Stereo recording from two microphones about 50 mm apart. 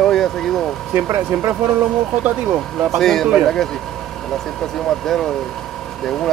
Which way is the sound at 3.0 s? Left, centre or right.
Centre.